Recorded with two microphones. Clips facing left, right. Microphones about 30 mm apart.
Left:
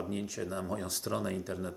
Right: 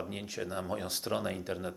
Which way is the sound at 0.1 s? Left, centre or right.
Right.